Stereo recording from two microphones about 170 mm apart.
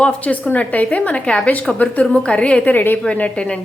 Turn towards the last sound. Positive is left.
turn(degrees=5)  # may be behind; listen again after turning